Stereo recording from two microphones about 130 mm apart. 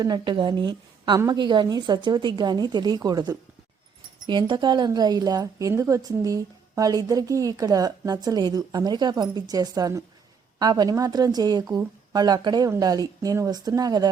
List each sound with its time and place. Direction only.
0.0 s a woman's voice: 35° right (ahead or behind)